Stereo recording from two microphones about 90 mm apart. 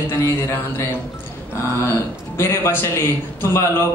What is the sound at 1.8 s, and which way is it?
A man's voice, 30° left (ahead or behind).